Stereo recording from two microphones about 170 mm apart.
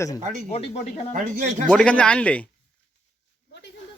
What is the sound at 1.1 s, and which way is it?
Speech, 50° right (ahead or behind).